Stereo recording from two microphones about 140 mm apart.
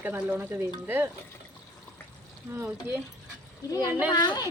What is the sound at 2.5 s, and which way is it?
Speech, 15° right (ahead or behind).